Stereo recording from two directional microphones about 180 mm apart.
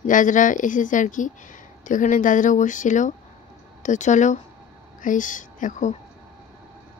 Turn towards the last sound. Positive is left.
turn(degrees=45)  # may be behind; listen again after turning